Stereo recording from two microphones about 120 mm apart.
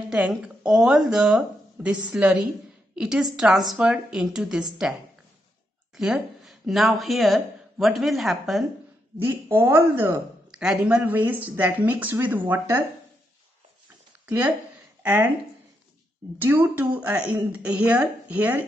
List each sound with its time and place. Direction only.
0.1 s speech: 10° right (ahead or behind)
5.9 s speech: 5° right (ahead or behind)
9.2 s speech: 15° right (ahead or behind)
10.5 s speech: 5° right (ahead or behind); by 12.8 s 20° right (ahead or behind)
15.0 s speech: 15° right (ahead or behind)
16.3 s speech: 15° right (ahead or behind)